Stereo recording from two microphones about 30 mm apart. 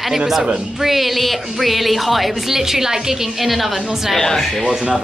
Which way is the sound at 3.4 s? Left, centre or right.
Centre.